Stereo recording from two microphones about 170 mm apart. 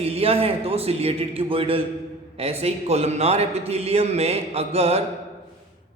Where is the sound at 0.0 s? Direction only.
35° right (ahead or behind).